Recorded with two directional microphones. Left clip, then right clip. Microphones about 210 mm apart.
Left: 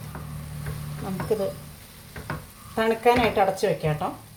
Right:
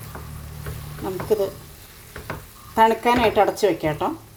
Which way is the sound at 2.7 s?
55° right (ahead or behind).